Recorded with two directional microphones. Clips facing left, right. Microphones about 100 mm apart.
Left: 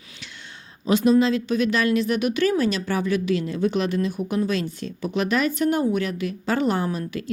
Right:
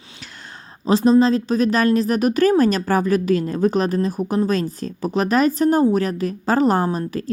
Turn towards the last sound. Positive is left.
turn(degrees=-40)  # may be behind; listen again after turning